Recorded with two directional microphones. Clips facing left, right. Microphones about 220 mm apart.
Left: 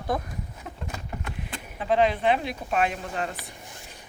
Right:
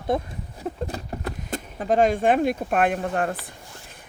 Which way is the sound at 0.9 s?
40° right (ahead or behind).